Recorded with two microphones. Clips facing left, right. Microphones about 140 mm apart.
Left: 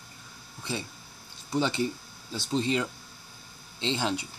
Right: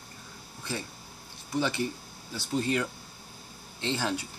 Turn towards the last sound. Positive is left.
turn(degrees=20)  # may be behind; listen again after turning